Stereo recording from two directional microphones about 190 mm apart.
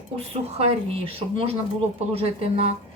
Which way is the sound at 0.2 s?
30° right (ahead or behind).